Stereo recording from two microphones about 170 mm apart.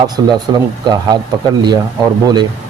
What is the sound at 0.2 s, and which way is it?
Speech, 25° right (ahead or behind).